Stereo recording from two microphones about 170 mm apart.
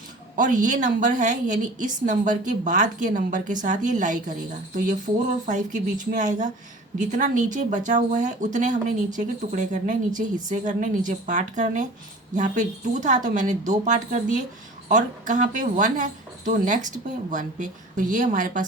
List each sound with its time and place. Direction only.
0.3 s a woman's voice: 50° right (ahead or behind)
5.5 s a woman's voice: 45° right (ahead or behind)